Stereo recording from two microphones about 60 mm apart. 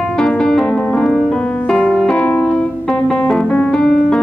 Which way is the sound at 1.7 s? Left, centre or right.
Centre.